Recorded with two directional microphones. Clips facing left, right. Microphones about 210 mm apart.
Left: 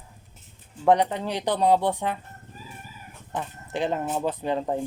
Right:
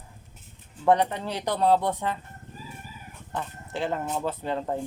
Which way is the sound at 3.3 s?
15° left (ahead or behind).